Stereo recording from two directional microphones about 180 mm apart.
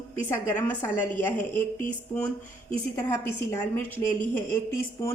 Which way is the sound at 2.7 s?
15° left (ahead or behind).